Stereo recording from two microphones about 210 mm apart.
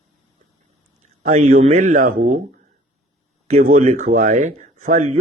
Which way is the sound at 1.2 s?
35° right (ahead or behind).